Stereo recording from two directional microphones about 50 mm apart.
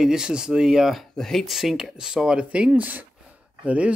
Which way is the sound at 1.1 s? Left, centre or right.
Centre.